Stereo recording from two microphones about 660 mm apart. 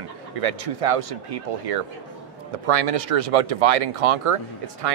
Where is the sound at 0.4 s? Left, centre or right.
Right.